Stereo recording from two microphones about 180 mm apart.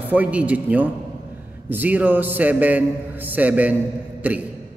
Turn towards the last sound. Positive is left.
turn(degrees=-10)  # may be behind; listen again after turning